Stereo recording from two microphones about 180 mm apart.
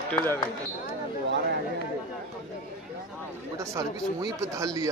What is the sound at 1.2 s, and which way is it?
Speech, 75° right (ahead or behind).